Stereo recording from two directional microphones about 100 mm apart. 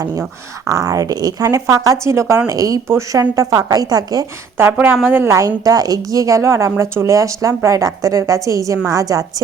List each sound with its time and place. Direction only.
0.7 s a woman's voice: 35° right (ahead or behind)
4.5 s a woman's voice: 20° right (ahead or behind)
5.4 s a woman's voice: 35° right (ahead or behind)